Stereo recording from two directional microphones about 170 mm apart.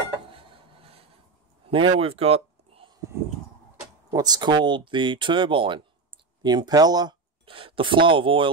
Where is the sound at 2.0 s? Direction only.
35° right (ahead or behind).